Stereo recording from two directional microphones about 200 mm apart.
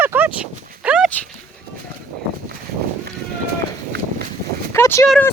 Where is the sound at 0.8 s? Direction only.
5° right (ahead or behind).